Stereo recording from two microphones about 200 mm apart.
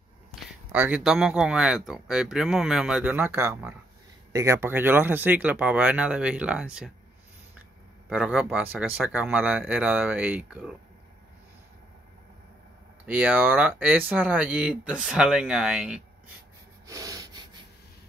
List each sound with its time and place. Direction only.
0.4 s speech: 10° right (ahead or behind)
8.1 s speech: 5° right (ahead or behind)
13.0 s speech: 10° right (ahead or behind)
16.8 s snort: 15° right (ahead or behind)